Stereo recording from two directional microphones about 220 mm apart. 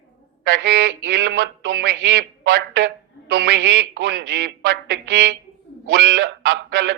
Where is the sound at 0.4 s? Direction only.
55° right (ahead or behind).